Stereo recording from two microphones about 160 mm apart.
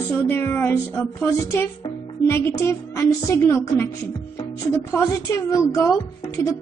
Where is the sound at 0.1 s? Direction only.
15° left (ahead or behind).